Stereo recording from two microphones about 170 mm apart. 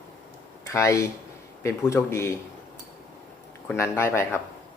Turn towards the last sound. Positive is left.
turn(degrees=15)  # may be behind; listen again after turning